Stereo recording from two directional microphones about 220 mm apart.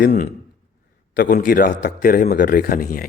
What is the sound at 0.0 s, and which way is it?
A man's voice, 40° left (ahead or behind).